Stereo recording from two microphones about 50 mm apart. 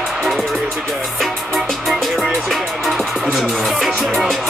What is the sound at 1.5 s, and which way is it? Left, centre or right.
Music, centre.